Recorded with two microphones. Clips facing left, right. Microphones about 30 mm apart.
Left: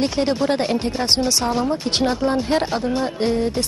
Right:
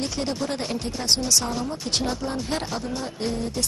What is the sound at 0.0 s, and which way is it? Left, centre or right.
Speech, left.